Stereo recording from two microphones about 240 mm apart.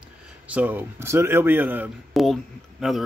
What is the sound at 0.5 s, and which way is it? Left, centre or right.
A man's voice, centre.